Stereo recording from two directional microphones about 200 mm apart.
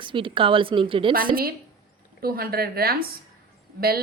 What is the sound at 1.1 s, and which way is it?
A woman's voice, 45° right (ahead or behind).